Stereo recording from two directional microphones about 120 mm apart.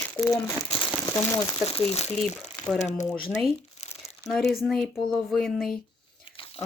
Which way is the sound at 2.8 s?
85° left.